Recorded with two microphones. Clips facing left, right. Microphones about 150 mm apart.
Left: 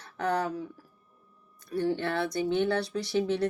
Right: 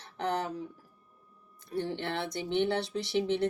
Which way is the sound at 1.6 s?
25° right (ahead or behind).